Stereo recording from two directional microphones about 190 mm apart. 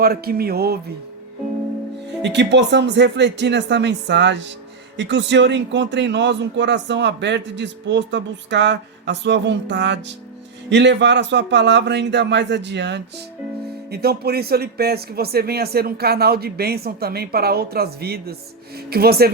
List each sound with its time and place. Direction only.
0.0 s speech: 55° right (ahead or behind)
2.2 s a man's voice: 65° right (ahead or behind)